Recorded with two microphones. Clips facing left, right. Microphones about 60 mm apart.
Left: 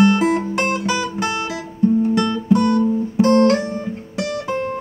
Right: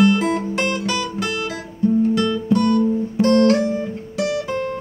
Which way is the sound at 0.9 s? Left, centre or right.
Centre.